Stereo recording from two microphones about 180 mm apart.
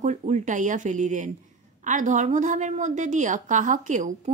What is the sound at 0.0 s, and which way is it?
A woman's voice, 40° right (ahead or behind).